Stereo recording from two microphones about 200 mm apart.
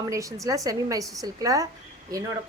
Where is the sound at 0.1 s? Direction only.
15° right (ahead or behind).